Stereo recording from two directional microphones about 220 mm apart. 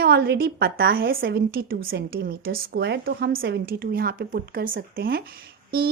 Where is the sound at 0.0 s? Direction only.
45° right (ahead or behind).